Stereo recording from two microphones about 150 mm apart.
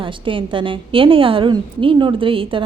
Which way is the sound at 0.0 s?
35° right (ahead or behind).